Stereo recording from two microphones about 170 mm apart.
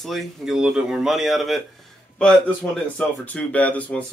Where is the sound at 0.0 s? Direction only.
Centre (ahead or behind).